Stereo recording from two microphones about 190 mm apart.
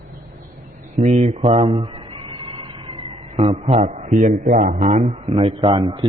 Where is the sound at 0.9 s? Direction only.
40° right (ahead or behind).